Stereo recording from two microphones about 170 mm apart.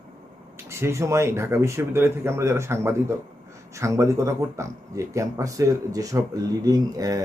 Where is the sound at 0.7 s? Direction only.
15° right (ahead or behind).